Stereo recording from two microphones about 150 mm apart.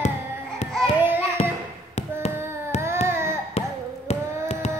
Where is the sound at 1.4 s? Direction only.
40° left (ahead or behind).